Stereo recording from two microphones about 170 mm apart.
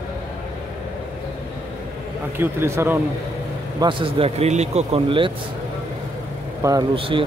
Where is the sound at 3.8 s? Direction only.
30° right (ahead or behind).